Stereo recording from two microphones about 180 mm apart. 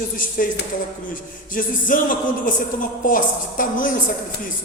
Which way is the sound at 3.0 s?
50° left (ahead or behind).